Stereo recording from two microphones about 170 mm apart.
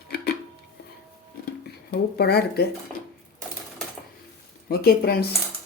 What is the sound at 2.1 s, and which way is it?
Speech, 70° left (ahead or behind).